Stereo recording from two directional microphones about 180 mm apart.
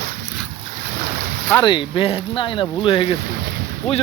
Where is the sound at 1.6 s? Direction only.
30° left (ahead or behind).